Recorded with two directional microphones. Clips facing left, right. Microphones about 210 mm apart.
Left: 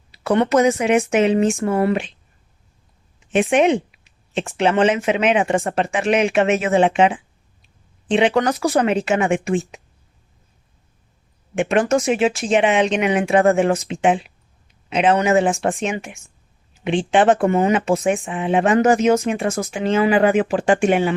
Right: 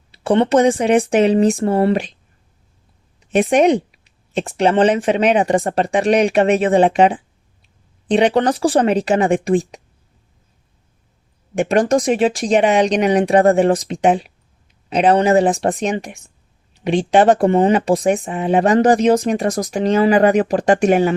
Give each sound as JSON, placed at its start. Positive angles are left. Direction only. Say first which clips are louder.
{"t": 0.1, "sound": "speech", "louder": "right 3 dB", "side_deg": -30}
{"t": 3.2, "sound": "speech", "louder": "right 2 dB", "side_deg": -40}
{"t": 11.5, "sound": "speech", "louder": "right 2 dB", "side_deg": -35}